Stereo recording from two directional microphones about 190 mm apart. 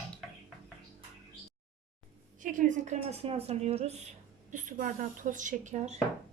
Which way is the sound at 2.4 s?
45° right (ahead or behind).